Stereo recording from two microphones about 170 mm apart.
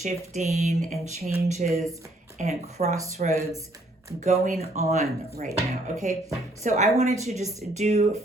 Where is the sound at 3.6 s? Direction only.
20° right (ahead or behind).